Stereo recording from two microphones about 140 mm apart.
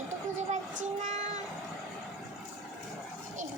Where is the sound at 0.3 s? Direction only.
60° right (ahead or behind).